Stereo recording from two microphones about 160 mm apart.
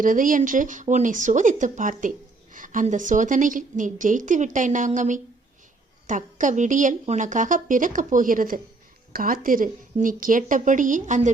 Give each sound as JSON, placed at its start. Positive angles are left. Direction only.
{"t": 0.0, "sound": "a woman's voice", "side_deg": -55}